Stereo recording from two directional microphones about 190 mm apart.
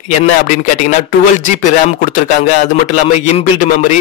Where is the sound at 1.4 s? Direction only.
40° left (ahead or behind).